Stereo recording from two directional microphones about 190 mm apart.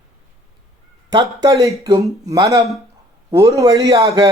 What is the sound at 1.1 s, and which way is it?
Speech, 20° right (ahead or behind).